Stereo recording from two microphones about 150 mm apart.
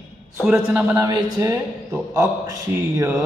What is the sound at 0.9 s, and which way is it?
Speech, 25° right (ahead or behind).